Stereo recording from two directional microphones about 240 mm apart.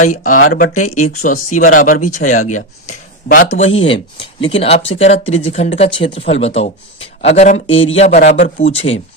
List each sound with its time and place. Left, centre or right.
0.0 s speech: left